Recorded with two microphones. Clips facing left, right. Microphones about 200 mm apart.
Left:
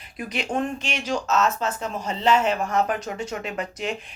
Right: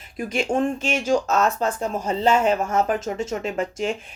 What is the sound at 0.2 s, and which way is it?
Speech, 45° right (ahead or behind).